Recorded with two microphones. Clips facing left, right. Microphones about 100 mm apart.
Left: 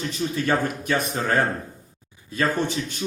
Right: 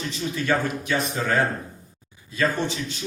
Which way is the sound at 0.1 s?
45° left (ahead or behind).